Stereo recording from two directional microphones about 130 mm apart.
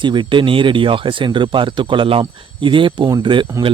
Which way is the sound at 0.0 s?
40° right (ahead or behind).